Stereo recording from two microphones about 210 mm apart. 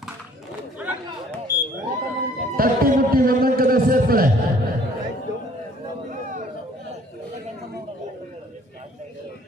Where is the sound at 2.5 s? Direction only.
45° right (ahead or behind).